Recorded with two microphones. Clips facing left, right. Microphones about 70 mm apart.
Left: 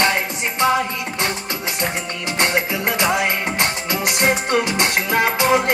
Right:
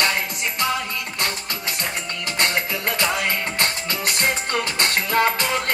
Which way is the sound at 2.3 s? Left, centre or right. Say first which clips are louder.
Left 4 dB; centre.